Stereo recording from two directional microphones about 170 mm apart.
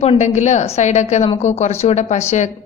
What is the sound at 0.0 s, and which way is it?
A woman's voice, 40° left (ahead or behind).